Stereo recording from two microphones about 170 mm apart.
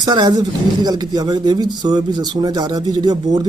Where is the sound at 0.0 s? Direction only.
25° right (ahead or behind).